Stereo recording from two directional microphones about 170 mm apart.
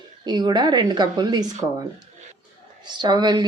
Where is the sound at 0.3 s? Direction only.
25° right (ahead or behind).